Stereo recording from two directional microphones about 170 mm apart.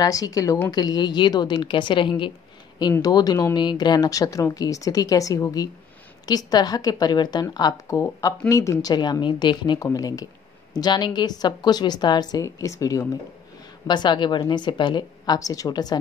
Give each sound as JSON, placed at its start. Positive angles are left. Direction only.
{"t": 0.0, "sound": "speech", "side_deg": 20}